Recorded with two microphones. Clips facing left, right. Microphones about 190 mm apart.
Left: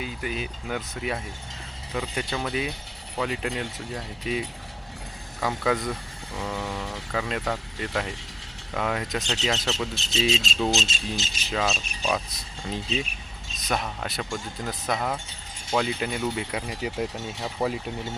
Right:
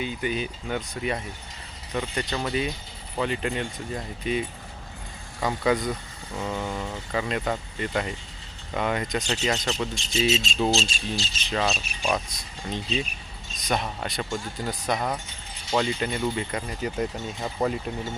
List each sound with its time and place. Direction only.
0.0 s speech: centre (ahead or behind)
10.7 s speech: 20° left (ahead or behind)
11.4 s speech: centre (ahead or behind)